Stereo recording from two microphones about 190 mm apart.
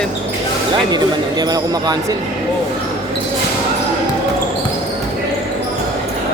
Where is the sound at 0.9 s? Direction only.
20° right (ahead or behind).